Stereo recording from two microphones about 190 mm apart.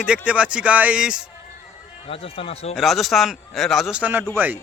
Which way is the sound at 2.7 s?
Centre (ahead or behind).